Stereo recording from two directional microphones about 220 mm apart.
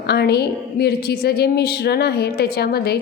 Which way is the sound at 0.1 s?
45° left (ahead or behind).